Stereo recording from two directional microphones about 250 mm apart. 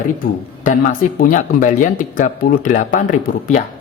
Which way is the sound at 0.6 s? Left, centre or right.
Left.